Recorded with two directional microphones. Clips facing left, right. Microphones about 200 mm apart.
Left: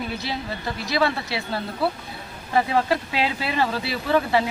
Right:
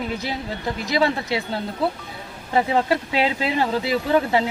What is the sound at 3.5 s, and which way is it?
Speech, 15° right (ahead or behind).